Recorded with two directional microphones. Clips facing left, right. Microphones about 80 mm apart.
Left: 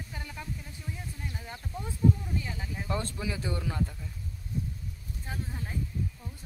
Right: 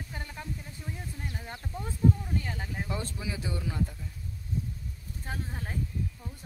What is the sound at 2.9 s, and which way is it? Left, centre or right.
Speech, centre.